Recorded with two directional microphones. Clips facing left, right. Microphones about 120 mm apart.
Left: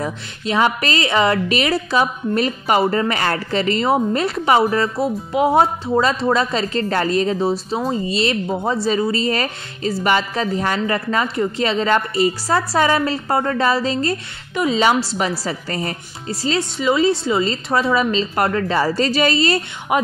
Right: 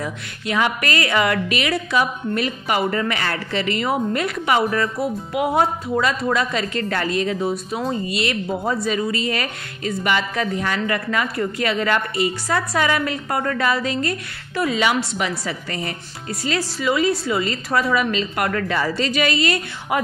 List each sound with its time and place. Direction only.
0.0 s a woman's voice: 35° left (ahead or behind)
14.5 s a woman's voice: 20° left (ahead or behind)
14.8 s a woman's voice: 35° left (ahead or behind)
19.9 s speech: 20° left (ahead or behind)